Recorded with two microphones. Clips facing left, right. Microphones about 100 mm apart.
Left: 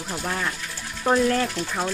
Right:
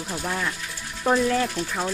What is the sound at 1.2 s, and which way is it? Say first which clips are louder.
Speech: left 1 dB; 5° right (ahead or behind).